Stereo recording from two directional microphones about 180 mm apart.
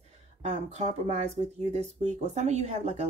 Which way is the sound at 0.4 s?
40° right (ahead or behind).